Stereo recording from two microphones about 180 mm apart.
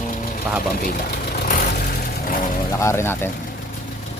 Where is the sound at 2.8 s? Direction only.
15° left (ahead or behind).